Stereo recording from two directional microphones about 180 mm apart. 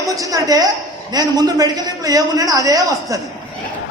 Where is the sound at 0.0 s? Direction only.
20° right (ahead or behind).